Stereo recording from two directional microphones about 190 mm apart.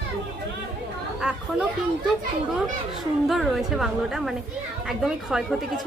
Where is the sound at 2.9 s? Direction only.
Centre (ahead or behind).